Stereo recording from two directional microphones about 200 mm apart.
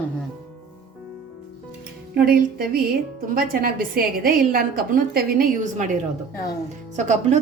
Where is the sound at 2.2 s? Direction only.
45° right (ahead or behind).